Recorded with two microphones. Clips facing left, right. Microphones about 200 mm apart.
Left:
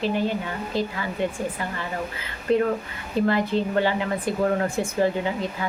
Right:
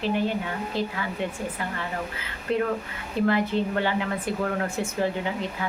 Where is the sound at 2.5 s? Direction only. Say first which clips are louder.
Left 4 dB; 40° left (ahead or behind).